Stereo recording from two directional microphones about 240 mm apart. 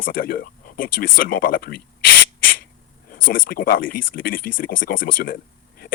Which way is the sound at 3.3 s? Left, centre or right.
Left.